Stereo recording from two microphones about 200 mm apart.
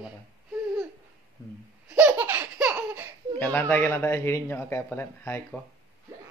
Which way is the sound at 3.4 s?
10° left (ahead or behind).